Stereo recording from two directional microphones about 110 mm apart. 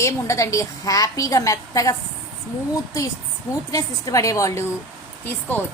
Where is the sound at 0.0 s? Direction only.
30° left (ahead or behind).